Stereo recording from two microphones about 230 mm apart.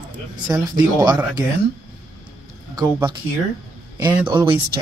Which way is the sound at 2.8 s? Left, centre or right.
Centre.